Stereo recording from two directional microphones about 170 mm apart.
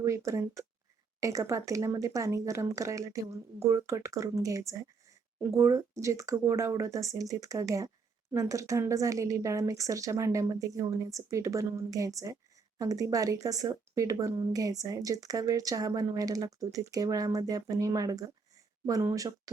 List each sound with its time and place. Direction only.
0.0 s speech: 20° right (ahead or behind)